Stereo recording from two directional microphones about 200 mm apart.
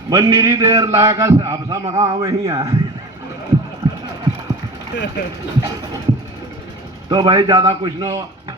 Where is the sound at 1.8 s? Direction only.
30° right (ahead or behind).